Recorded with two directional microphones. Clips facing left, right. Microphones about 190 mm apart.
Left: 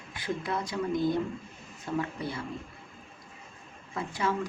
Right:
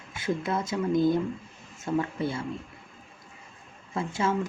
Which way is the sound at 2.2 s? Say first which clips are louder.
Right 5 dB; 25° right (ahead or behind).